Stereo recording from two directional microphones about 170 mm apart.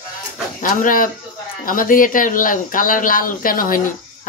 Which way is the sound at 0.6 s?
55° left (ahead or behind).